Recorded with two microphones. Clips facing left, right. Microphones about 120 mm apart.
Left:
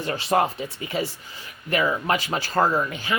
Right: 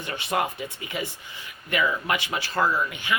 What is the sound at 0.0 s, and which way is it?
A man's voice, 35° left (ahead or behind).